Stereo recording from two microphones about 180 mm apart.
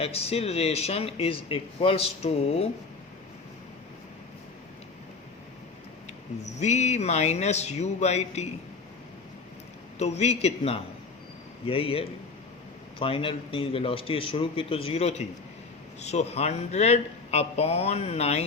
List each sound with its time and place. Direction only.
0.0 s speech: 35° left (ahead or behind)
6.6 s speech: 40° left (ahead or behind)
10.0 s speech: 40° left (ahead or behind)